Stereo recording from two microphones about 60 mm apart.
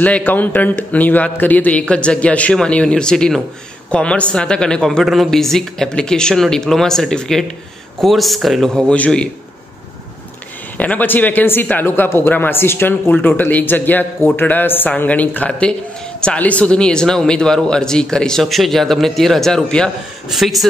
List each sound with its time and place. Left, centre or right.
0.0 s a man's voice: left
5.0 s speech: centre
8.9 s a man's voice: left
10.8 s a man's voice: left; by 19.9 s centre
20.2 s speech: centre